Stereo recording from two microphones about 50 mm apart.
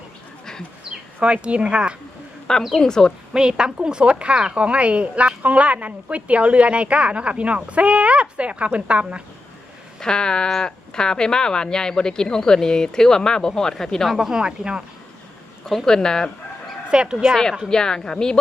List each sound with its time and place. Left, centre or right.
0.9 s speech: right
2.7 s speech: centre
3.3 s a woman's voice: centre
10.0 s speech: centre
14.2 s speech: centre
15.6 s speech: centre
16.9 s a woman's voice: centre
17.7 s speech: centre